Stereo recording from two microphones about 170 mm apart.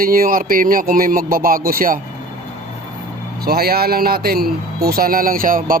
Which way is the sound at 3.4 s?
65° right (ahead or behind).